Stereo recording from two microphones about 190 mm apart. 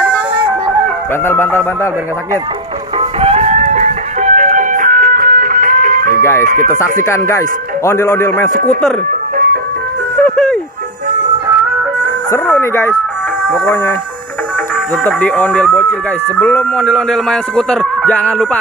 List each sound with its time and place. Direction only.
1.2 s speech: 10° left (ahead or behind)
3.0 s music: 30° right (ahead or behind)
6.4 s speech: 45° right (ahead or behind)
6.8 s speech: 15° left (ahead or behind)
10.2 s music: 5° left (ahead or behind)
12.3 s speech: 15° left (ahead or behind)
15.0 s speech: 10° left (ahead or behind)